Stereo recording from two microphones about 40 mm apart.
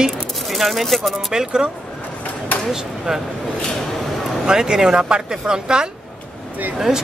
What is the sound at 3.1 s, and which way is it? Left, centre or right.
Speech, centre.